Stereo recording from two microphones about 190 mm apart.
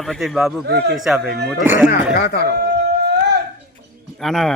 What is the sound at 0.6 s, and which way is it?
Speech, 60° right (ahead or behind).